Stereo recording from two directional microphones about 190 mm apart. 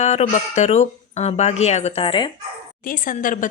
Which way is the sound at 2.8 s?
45° left (ahead or behind).